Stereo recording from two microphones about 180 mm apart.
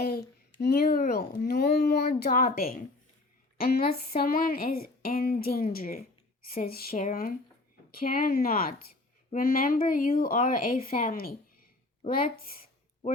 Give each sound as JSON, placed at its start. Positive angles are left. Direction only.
{"t": 0.6, "sound": "a woman's voice", "side_deg": 60}